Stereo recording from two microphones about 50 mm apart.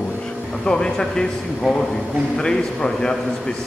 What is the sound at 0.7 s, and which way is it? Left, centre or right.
Speech, centre.